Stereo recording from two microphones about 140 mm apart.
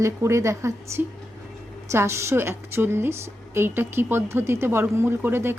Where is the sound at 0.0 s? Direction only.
20° right (ahead or behind).